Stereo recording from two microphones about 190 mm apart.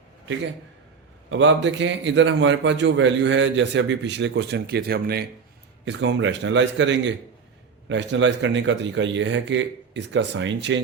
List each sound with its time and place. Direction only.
1.3 s a man's voice: 75° right (ahead or behind); by 5.2 s 55° right (ahead or behind)
5.8 s a man's voice: 75° right (ahead or behind)